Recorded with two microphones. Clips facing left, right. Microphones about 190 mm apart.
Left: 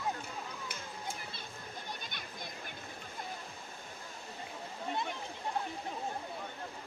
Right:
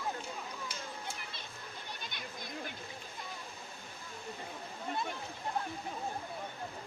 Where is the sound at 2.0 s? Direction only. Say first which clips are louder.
Right 1 dB; 50° left (ahead or behind).